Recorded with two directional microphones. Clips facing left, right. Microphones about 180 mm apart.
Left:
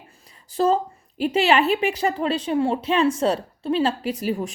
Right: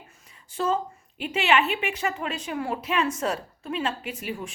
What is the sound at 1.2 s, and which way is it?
A woman's voice, 35° left (ahead or behind).